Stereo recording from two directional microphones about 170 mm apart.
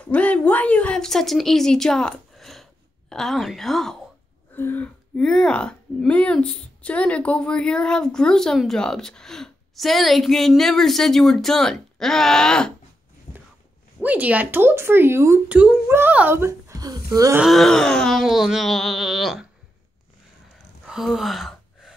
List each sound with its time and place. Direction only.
0.0 s speech: 10° left (ahead or behind)
13.3 s a sound: 45° left (ahead or behind)
14.0 s speech: 10° right (ahead or behind)
17.4 s speech: centre (ahead or behind)
20.5 s gasp: centre (ahead or behind)